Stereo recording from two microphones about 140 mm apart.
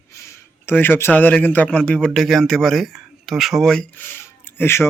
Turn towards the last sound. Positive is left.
turn(degrees=15)  # may be behind; listen again after turning